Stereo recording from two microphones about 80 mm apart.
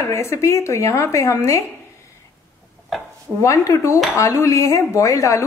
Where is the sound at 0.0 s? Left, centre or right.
Left.